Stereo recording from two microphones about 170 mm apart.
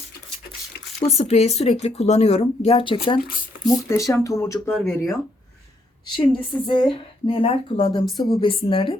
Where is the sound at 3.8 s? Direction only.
20° left (ahead or behind).